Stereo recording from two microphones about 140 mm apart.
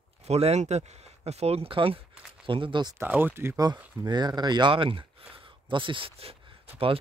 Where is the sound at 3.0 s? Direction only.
15° right (ahead or behind).